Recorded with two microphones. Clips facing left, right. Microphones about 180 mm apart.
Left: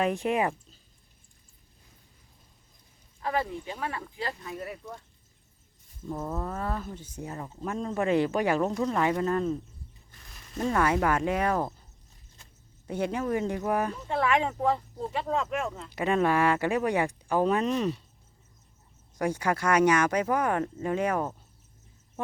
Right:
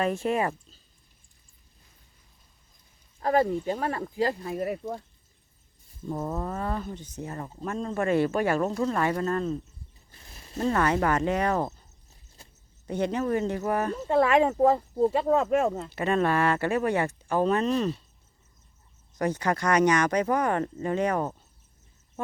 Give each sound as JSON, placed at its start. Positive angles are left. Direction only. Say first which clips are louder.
{"t": 0.0, "sound": "speech", "louder": "even", "side_deg": 15}
{"t": 3.2, "sound": "speech", "louder": "right 7 dB", "side_deg": -40}
{"t": 6.1, "sound": "speech", "louder": "right 2 dB", "side_deg": -10}
{"t": 8.6, "sound": "speech", "louder": "right 1 dB", "side_deg": 0}
{"t": 8.9, "sound": "speech", "louder": "even", "side_deg": 10}
{"t": 10.1, "sound": "a sound", "louder": "right 3 dB", "side_deg": -30}
{"t": 10.6, "sound": "speech", "louder": "right 1 dB", "side_deg": 5}
{"t": 12.9, "sound": "speech", "louder": "right 2 dB", "side_deg": 10}
{"t": 13.9, "sound": "speech", "louder": "right 5 dB", "side_deg": -40}
{"t": 15.9, "sound": "speech", "louder": "even", "side_deg": 15}
{"t": 19.1, "sound": "speech", "louder": "right 1 dB", "side_deg": 10}